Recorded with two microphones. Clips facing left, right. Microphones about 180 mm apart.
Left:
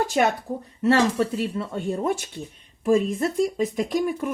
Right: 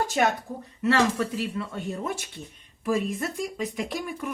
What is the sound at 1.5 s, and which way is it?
A woman's voice, 40° left (ahead or behind).